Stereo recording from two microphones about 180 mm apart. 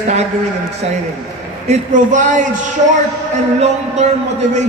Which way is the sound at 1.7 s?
45° right (ahead or behind).